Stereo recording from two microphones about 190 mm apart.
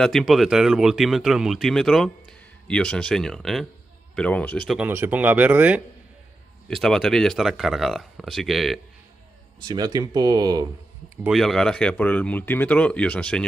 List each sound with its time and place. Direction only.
0.0 s speech: centre (ahead or behind)
4.7 s speech: 10° right (ahead or behind)
6.7 s speech: centre (ahead or behind)
9.6 s speech: 20° right (ahead or behind)
11.2 s speech: centre (ahead or behind)